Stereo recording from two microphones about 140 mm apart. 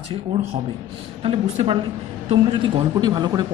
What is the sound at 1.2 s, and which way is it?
A woman's voice, 45° right (ahead or behind).